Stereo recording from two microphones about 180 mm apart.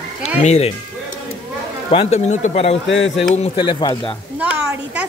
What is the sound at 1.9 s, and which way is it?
Speech, 35° left (ahead or behind).